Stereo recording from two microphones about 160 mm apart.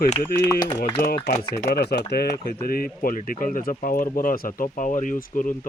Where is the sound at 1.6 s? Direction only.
85° left.